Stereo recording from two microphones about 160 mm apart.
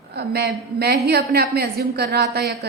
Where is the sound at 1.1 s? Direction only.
80° right.